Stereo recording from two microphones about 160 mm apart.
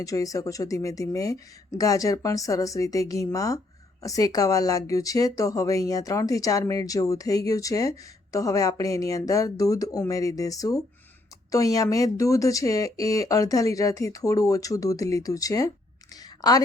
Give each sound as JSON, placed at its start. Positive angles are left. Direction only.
{"t": 0.0, "sound": "a woman's voice", "side_deg": 20}